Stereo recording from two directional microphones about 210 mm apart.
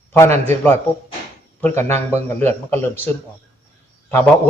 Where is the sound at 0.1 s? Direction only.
10° left (ahead or behind).